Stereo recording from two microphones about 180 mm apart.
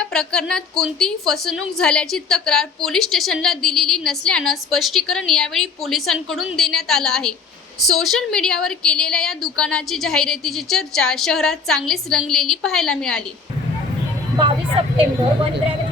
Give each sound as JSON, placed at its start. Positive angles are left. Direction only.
{"t": 0.0, "sound": "a woman's voice", "side_deg": 5}
{"t": 14.3, "sound": "speech", "side_deg": -30}